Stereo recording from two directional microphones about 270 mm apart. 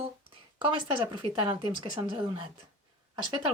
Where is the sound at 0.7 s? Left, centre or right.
Centre.